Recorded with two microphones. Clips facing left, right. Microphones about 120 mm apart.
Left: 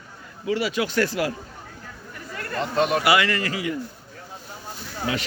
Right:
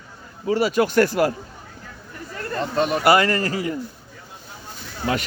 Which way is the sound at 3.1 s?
40° right (ahead or behind).